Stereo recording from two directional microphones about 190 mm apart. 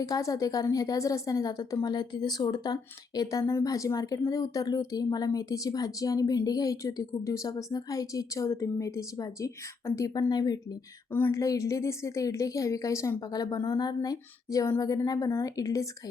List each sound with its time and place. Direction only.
0.0 s speech: 15° left (ahead or behind)